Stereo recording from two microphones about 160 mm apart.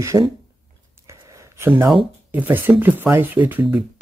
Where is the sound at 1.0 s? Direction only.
20° right (ahead or behind).